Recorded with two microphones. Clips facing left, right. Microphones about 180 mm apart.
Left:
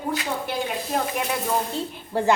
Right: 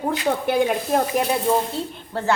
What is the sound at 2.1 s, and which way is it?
Speech, 15° left (ahead or behind).